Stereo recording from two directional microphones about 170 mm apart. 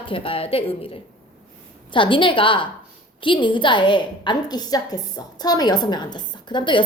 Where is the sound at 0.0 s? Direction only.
30° left (ahead or behind).